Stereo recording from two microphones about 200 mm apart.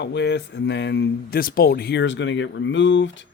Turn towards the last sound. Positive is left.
turn(degrees=65)  # may be behind; listen again after turning